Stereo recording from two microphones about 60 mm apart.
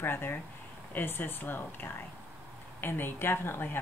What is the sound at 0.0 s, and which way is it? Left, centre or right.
Speech, left.